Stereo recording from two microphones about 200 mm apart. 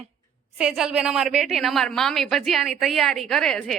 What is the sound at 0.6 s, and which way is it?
A woman's voice, 5° right (ahead or behind).